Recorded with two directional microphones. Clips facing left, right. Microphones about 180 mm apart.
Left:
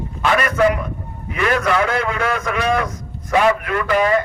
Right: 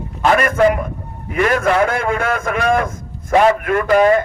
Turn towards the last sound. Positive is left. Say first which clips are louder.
# right 4 dB
turn(degrees=-45)  # may be behind; listen again after turning